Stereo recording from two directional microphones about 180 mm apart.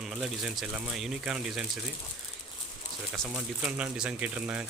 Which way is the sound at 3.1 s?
Centre (ahead or behind).